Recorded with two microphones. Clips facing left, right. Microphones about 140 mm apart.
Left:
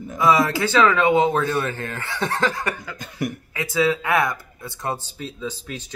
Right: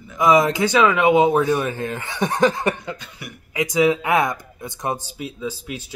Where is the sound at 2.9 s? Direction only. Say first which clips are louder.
Left 11 dB; 45° left (ahead or behind).